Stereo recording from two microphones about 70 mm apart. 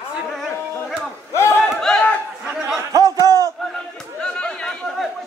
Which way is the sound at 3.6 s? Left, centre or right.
Centre.